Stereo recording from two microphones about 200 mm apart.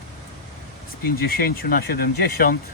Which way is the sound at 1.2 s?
50° left (ahead or behind).